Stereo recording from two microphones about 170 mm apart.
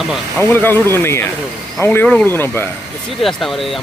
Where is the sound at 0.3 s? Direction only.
15° left (ahead or behind).